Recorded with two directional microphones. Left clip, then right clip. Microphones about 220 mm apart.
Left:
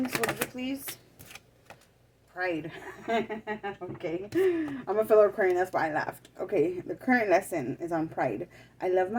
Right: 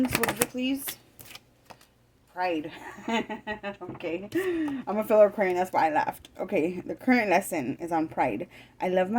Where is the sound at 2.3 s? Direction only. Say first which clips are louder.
Right 3 dB; 50° right (ahead or behind).